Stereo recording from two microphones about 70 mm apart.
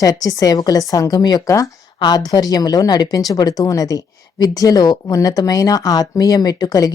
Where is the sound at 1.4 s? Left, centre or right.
Left.